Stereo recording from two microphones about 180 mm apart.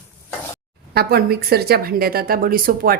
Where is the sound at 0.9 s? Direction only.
60° right (ahead or behind).